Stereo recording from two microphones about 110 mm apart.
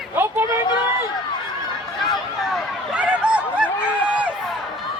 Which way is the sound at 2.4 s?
5° right (ahead or behind).